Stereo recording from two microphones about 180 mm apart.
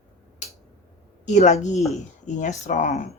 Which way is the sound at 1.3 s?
40° left (ahead or behind).